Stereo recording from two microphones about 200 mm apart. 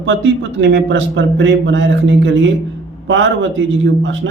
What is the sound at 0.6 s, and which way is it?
Speech, 65° right (ahead or behind).